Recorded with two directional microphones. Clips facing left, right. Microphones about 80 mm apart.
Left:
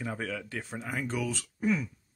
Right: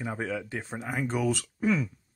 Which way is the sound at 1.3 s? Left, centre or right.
Right.